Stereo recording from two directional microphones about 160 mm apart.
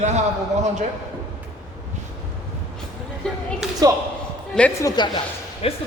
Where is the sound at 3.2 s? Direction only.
5° left (ahead or behind).